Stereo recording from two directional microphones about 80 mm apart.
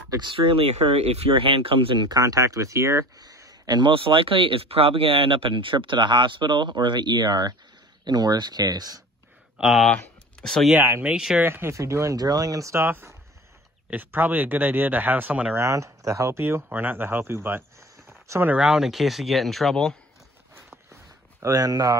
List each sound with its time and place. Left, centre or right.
0.2 s speech: right
3.2 s a sound: right
3.8 s speech: right
9.6 s speech: centre
11.0 s speech: centre
11.3 s speech: right
11.7 s speech: right
12.8 s speech: right
15.5 s speech: right
18.6 s speech: centre
21.4 s speech: right